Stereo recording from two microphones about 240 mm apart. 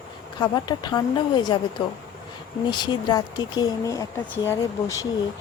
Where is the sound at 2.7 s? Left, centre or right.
Centre.